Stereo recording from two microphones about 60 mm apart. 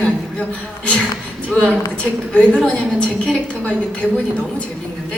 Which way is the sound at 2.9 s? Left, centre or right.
Centre.